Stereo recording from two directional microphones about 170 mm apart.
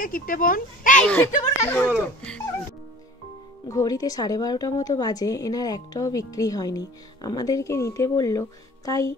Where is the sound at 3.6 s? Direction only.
20° left (ahead or behind).